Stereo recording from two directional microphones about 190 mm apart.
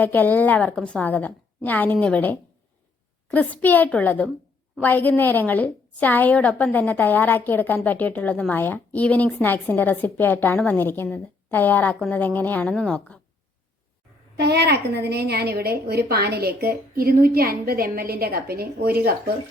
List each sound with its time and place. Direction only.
0.0 s a woman's voice: 10° left (ahead or behind)
14.3 s a woman's voice: 60° right (ahead or behind)